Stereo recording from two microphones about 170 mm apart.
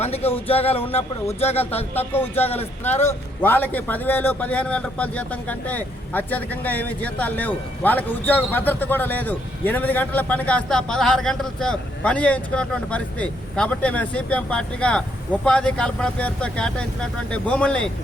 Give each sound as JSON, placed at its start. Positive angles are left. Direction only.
{"t": 0.0, "sound": "a sound", "side_deg": 35}
{"t": 0.4, "sound": "music", "side_deg": 35}
{"t": 2.0, "sound": "a man's voice", "side_deg": 10}